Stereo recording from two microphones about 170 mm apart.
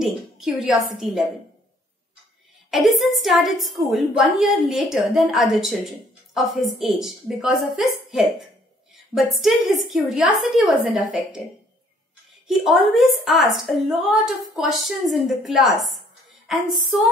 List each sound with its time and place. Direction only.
0.0 s a woman's voice: centre (ahead or behind)
2.7 s a woman's voice: centre (ahead or behind)
12.4 s a woman's voice: centre (ahead or behind)